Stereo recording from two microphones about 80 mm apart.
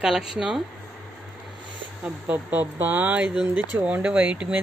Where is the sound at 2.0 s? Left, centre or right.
Centre.